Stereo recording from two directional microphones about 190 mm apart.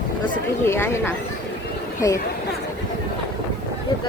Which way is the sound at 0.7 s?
10° left (ahead or behind).